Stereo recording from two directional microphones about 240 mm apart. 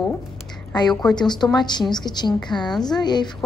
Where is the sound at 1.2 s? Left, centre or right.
Centre.